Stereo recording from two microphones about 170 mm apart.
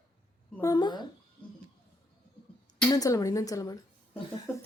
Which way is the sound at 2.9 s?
20° left (ahead or behind).